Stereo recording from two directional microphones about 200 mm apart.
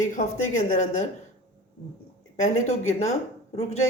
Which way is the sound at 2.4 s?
35° left (ahead or behind).